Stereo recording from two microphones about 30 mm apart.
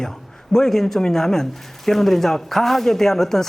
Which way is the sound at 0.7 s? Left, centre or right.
Centre.